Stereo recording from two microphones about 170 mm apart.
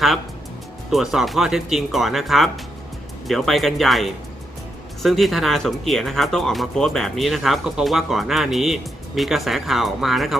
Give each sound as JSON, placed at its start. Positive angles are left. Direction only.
{"t": 0.9, "sound": "speech", "side_deg": 0}